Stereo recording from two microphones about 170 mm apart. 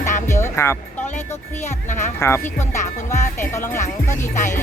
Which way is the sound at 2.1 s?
15° left (ahead or behind).